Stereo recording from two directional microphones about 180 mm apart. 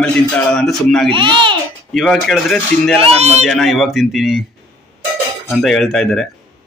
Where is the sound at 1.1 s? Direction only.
25° right (ahead or behind).